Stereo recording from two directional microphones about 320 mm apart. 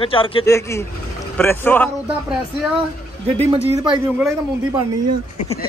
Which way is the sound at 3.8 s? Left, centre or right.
Centre.